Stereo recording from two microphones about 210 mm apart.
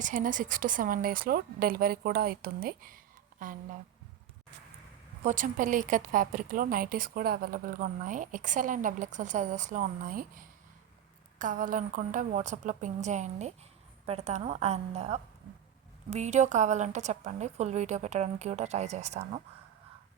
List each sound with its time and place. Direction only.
0.0 s speech: 40° right (ahead or behind)
5.2 s speech: 35° right (ahead or behind)